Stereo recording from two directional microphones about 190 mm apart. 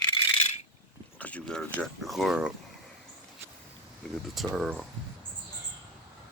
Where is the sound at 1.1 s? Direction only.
5° left (ahead or behind).